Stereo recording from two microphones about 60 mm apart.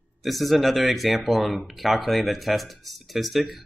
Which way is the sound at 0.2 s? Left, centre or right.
Centre.